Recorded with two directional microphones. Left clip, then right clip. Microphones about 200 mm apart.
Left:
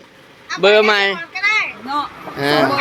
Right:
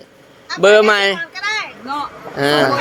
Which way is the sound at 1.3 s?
5° right (ahead or behind).